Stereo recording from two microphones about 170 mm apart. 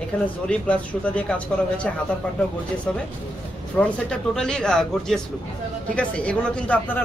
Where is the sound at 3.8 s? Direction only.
5° left (ahead or behind).